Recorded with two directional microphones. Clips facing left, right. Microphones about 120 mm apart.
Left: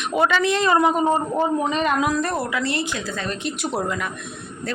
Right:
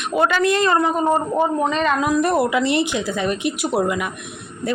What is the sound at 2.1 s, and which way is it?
Speech, 15° right (ahead or behind).